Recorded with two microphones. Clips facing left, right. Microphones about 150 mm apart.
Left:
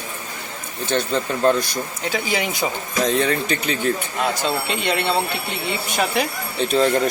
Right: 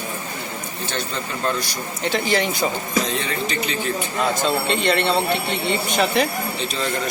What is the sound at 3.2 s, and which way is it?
Speech, 55° left (ahead or behind).